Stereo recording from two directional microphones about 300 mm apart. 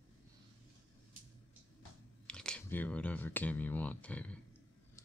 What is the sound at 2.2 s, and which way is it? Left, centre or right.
Speech, centre.